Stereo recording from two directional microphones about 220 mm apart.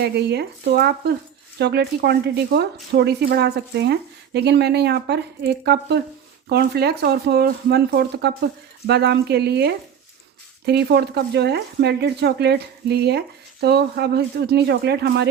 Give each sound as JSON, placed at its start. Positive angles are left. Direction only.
{"t": 0.0, "sound": "speech", "side_deg": -50}